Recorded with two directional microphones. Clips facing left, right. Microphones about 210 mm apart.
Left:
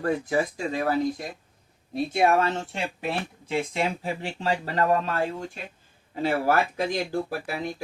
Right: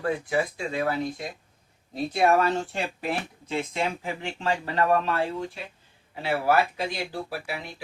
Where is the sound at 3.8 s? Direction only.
35° left (ahead or behind).